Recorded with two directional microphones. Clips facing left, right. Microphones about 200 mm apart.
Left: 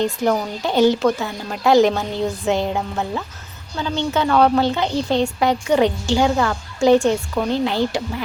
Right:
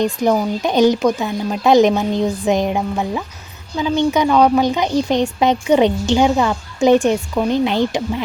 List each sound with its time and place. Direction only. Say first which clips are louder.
0.0 s speech: right 3 dB; 15° right (ahead or behind)